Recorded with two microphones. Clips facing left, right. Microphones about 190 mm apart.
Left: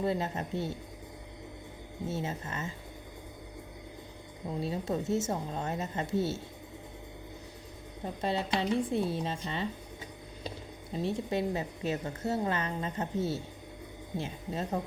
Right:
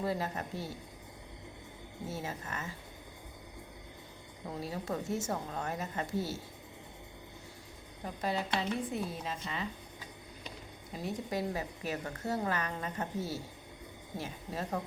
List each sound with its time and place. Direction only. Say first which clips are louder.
0.0 s a woman's voice: left 3 dB; 25° left (ahead or behind)
2.0 s a woman's voice: left 4 dB; 25° left (ahead or behind)
4.4 s a woman's voice: left 4 dB; 20° left (ahead or behind)
8.0 s a woman's voice: left 3 dB; 25° left (ahead or behind)
10.9 s a woman's voice: left 5 dB; 25° left (ahead or behind)